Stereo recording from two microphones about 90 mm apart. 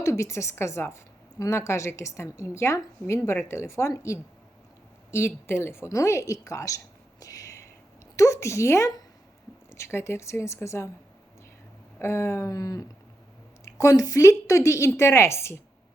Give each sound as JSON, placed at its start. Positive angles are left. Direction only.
{"t": 0.0, "sound": "speech", "side_deg": 35}
{"t": 11.9, "sound": "speech", "side_deg": 30}